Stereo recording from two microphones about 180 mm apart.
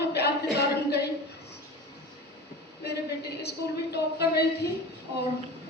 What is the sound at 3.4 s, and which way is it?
A woman's voice, 65° left (ahead or behind).